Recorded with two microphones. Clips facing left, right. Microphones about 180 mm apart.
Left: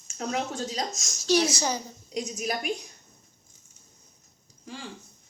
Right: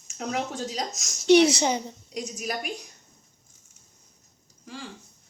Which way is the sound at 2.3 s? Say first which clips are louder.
Left 1 dB; centre (ahead or behind).